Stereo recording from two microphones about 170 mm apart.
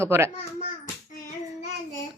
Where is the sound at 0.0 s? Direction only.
15° right (ahead or behind).